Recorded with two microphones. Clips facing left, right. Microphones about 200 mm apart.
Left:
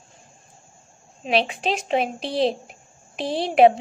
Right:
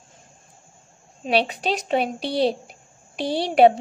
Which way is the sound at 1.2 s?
40° right (ahead or behind).